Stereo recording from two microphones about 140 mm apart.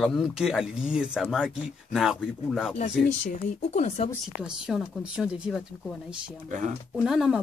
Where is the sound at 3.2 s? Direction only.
55° left (ahead or behind).